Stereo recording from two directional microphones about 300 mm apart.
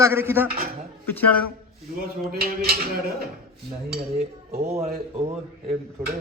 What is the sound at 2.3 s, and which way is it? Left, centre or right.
Speech, right.